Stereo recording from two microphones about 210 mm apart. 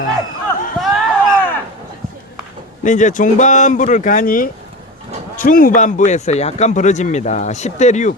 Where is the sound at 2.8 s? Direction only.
35° left (ahead or behind).